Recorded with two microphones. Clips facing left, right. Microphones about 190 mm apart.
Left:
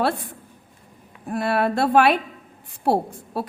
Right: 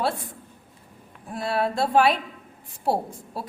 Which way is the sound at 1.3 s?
65° left (ahead or behind).